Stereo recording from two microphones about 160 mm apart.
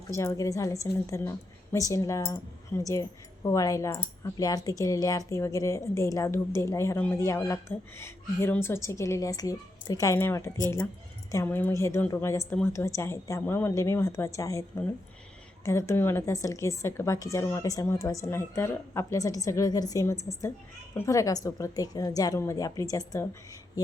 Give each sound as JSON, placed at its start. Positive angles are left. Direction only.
{"t": 0.1, "sound": "a woman's voice", "side_deg": 20}